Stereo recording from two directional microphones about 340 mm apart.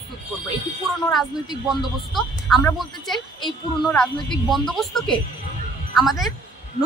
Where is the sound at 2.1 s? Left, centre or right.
Centre.